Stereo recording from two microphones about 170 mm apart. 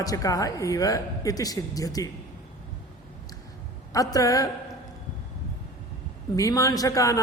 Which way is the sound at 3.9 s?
20° left (ahead or behind).